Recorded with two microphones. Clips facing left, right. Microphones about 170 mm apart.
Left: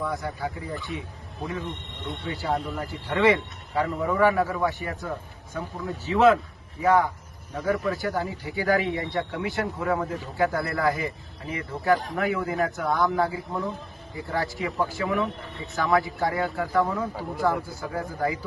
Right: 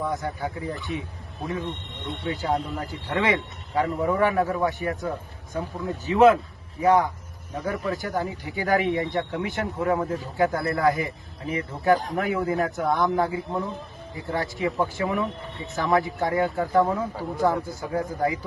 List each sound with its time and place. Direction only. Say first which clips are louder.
0.1 s speech: right 2 dB; 20° right (ahead or behind)